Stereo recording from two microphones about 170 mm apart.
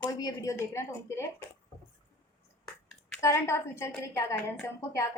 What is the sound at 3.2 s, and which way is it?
A woman's voice, 15° left (ahead or behind).